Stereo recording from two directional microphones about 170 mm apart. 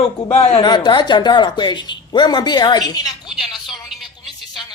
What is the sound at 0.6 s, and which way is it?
A woman's voice, 25° left (ahead or behind).